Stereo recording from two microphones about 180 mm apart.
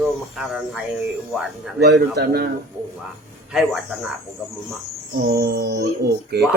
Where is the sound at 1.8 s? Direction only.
70° right (ahead or behind).